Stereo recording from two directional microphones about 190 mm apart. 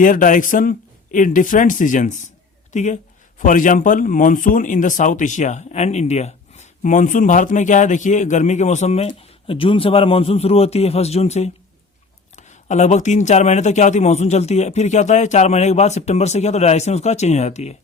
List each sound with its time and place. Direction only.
0.0 s speech: 45° left (ahead or behind)